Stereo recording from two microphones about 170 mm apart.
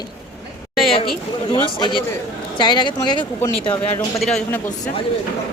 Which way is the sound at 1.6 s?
30° left (ahead or behind).